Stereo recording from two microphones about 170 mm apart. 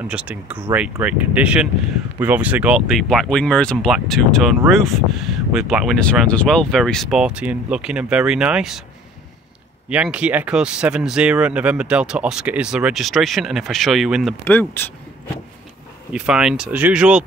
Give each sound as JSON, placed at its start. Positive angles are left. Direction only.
{"t": 0.1, "sound": "speech", "side_deg": -5}
{"t": 9.8, "sound": "speech", "side_deg": -5}
{"t": 14.4, "sound": "speech", "side_deg": 10}
{"t": 16.1, "sound": "speech", "side_deg": -5}